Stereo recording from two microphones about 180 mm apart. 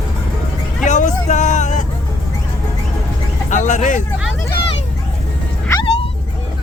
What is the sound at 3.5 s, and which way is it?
Vehicle, 45° left (ahead or behind).